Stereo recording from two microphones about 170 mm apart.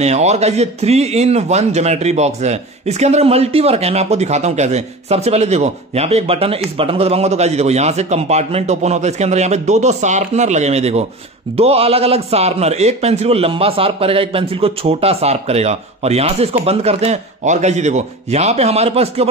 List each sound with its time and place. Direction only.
0.0 s a man's voice: 40° right (ahead or behind)